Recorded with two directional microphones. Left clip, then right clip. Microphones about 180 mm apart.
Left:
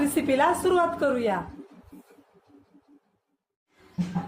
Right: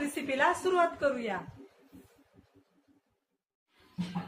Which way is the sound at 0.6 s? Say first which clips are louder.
Left 5 dB; 45° left (ahead or behind).